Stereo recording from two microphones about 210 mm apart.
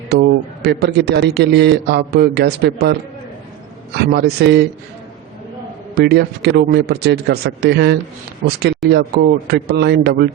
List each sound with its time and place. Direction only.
0.1 s a man's voice: 55° right (ahead or behind)
3.9 s a man's voice: 50° right (ahead or behind)
5.9 s a man's voice: 50° right (ahead or behind)